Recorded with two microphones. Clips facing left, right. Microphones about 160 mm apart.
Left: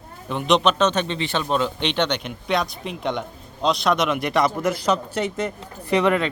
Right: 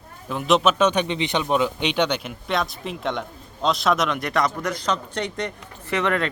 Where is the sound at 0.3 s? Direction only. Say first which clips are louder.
Even; centre (ahead or behind).